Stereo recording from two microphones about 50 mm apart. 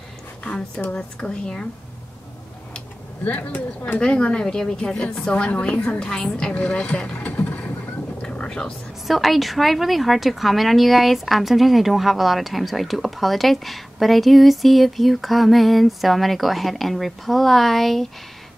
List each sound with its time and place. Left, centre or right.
0.4 s speech: left
3.3 s speech: left
4.0 s a woman's voice: left
6.5 s boat: left
8.5 s speech: centre
9.0 s a woman's voice: centre